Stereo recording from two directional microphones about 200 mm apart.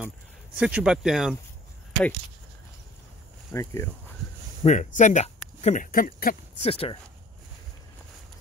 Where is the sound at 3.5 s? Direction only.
15° left (ahead or behind).